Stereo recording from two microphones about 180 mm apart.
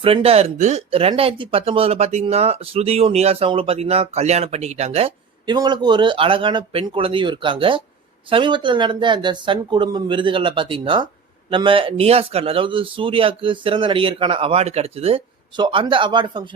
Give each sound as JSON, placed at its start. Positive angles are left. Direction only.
{"t": 0.0, "sound": "speech", "side_deg": -30}